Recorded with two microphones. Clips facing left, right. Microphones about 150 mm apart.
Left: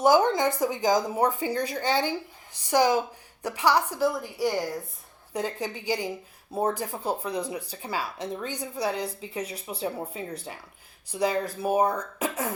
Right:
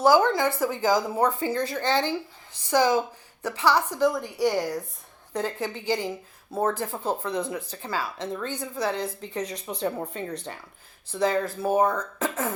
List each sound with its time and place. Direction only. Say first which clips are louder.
0.0 s a woman's voice: right 1 dB; 20° left (ahead or behind); by 4.8 s centre (ahead or behind)
5.3 s a woman's voice: right 1 dB; 15° left (ahead or behind)